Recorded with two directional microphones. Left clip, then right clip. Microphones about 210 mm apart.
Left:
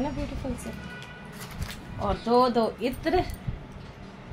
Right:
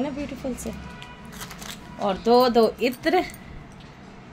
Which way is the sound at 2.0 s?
45° right (ahead or behind).